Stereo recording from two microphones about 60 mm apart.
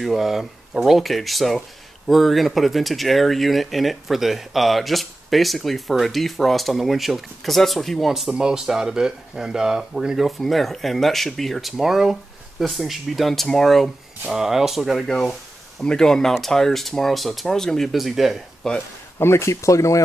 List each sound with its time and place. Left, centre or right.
0.0 s speech: centre
14.2 s speech: centre
15.0 s speech: centre
18.6 s speech: centre
19.1 s speech: left